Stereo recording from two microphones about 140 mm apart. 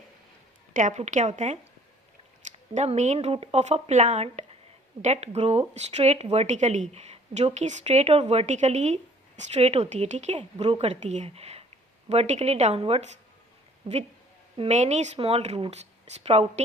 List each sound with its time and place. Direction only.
0.7 s a woman's voice: 65° right (ahead or behind)
2.7 s speech: 55° right (ahead or behind)
10.3 s speech: 40° right (ahead or behind)